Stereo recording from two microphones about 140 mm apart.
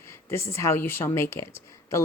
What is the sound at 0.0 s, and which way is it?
Speech, 20° left (ahead or behind).